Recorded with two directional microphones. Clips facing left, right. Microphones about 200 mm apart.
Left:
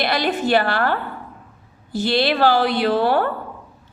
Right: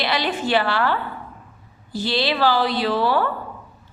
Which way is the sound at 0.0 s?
50° left (ahead or behind).